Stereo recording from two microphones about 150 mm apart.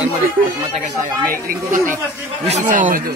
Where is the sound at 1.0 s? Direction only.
75° right (ahead or behind).